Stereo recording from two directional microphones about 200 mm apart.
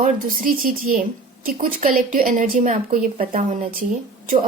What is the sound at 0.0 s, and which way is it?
A woman's voice, 45° right (ahead or behind).